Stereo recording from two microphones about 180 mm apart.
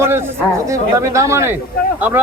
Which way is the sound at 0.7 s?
15° right (ahead or behind).